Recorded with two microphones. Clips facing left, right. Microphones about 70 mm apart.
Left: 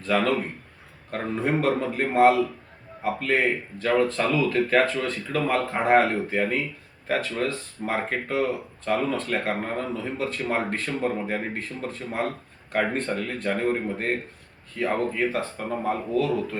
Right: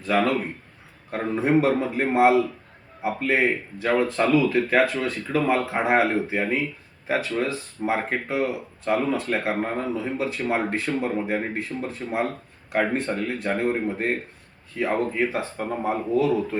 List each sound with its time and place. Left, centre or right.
0.0 s speech: centre